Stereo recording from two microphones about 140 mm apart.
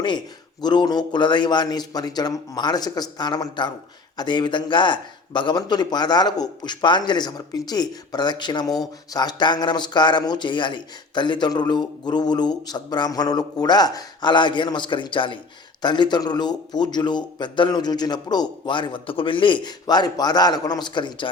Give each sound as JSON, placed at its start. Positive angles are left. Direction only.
{"t": 0.6, "sound": "a man's voice", "side_deg": 30}